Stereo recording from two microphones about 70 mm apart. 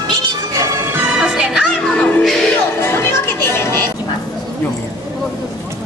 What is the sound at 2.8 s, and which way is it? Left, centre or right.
Music, left.